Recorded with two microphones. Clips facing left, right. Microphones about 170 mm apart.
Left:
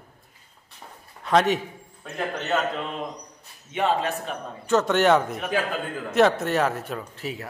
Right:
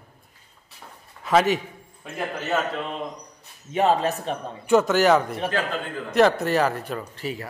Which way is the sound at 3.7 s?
40° right (ahead or behind).